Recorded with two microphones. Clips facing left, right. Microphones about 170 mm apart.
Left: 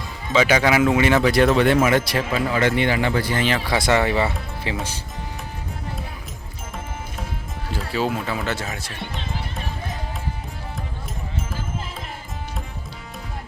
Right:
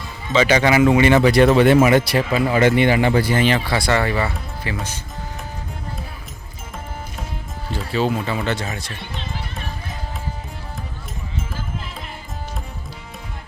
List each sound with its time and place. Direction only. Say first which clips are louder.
0.3 s speech: right 2 dB; 10° left (ahead or behind)
2.5 s speech: right 5 dB; 15° right (ahead or behind)
3.8 s speech: left 3 dB; 20° left (ahead or behind)
7.7 s speech: right 3 dB; 5° left (ahead or behind)